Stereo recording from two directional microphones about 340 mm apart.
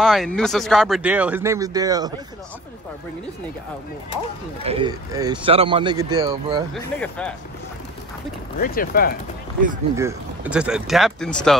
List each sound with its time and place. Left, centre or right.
0.0 s speech: centre
4.6 s speech: centre
6.7 s speech: centre
8.5 s speech: left
9.9 s speech: centre